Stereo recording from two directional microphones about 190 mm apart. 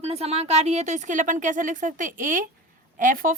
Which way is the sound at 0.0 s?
35° right (ahead or behind).